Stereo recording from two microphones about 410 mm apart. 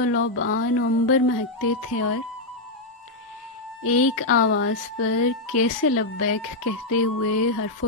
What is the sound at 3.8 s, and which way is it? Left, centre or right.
Speech, left.